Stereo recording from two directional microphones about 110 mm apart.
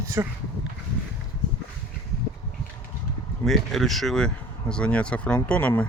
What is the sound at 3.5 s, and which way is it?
Speech, centre (ahead or behind).